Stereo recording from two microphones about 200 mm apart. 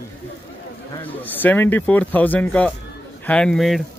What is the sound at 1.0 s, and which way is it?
Speech, 10° left (ahead or behind).